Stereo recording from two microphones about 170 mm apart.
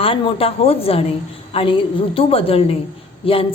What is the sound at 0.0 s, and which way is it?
A woman's voice, 35° left (ahead or behind).